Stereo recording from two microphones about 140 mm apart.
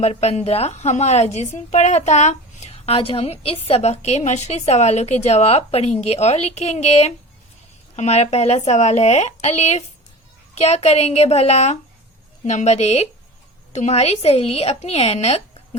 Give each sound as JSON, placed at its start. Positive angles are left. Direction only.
{"t": 0.0, "sound": "a woman's voice", "side_deg": 50}